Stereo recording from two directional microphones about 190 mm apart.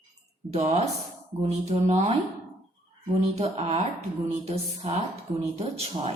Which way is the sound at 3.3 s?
35° right (ahead or behind).